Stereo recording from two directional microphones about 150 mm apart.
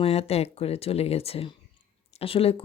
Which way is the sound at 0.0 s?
45° left (ahead or behind).